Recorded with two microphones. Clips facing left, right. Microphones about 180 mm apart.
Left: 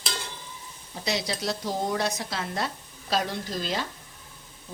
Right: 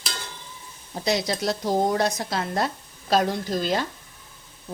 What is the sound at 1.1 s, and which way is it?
A woman's voice, 45° right (ahead or behind).